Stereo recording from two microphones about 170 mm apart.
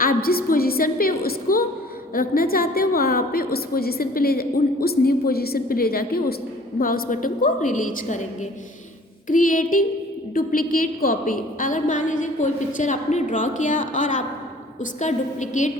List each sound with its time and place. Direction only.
0.0 s a woman's voice: 60° left (ahead or behind)
9.2 s a woman's voice: 50° left (ahead or behind)